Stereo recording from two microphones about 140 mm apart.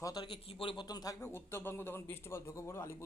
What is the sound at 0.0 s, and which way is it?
Speech, 25° left (ahead or behind).